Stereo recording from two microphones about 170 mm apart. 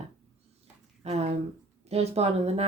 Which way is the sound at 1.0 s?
40° right (ahead or behind).